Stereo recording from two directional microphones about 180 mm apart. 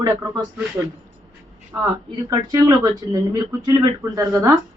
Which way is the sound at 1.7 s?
20° right (ahead or behind).